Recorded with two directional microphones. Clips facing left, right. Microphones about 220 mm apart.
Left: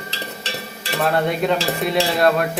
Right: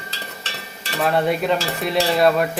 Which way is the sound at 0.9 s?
Centre (ahead or behind).